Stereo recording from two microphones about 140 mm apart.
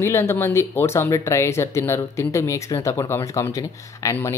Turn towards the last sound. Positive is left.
turn(degrees=20)  # may be behind; listen again after turning